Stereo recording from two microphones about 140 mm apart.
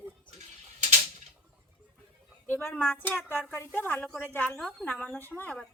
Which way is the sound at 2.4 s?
15° left (ahead or behind).